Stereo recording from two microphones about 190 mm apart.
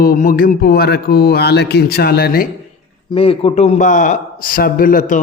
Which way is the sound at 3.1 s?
30° left (ahead or behind).